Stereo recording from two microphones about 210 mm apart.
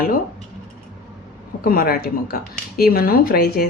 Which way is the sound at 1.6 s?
45° left (ahead or behind).